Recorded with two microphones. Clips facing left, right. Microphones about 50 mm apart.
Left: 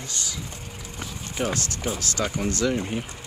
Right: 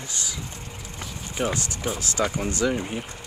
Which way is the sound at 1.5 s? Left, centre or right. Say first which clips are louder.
Even; centre.